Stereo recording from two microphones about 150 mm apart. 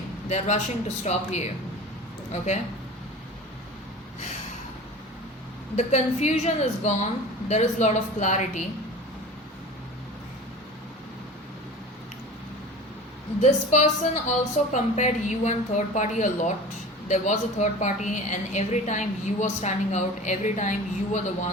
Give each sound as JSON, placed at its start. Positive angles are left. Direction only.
{"t": 0.3, "sound": "a woman's voice", "side_deg": 50}
{"t": 5.7, "sound": "a woman's voice", "side_deg": 50}
{"t": 13.4, "sound": "a woman's voice", "side_deg": 50}